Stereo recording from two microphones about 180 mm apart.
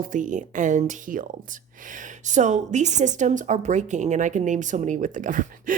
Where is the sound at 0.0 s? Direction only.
45° right (ahead or behind).